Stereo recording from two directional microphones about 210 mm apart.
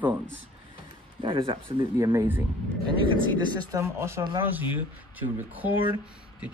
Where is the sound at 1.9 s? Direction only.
10° right (ahead or behind).